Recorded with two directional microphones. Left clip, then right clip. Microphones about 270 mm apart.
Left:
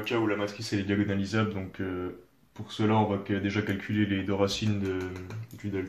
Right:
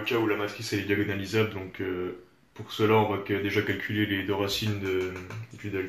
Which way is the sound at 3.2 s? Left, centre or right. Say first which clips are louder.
Right 3 dB; left.